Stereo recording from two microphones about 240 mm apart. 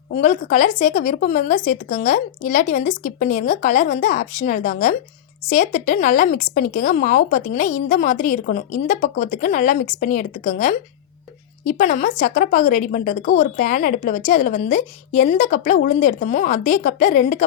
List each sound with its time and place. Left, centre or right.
0.2 s a woman's voice: left